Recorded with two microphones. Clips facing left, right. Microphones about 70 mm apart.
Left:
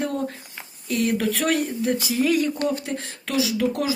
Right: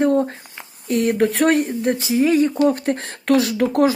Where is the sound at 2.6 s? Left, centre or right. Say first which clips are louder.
Right 7 dB; right.